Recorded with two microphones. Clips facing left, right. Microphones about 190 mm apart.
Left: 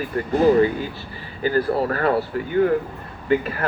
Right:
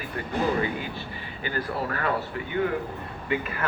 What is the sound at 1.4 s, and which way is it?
Speech, 40° left (ahead or behind).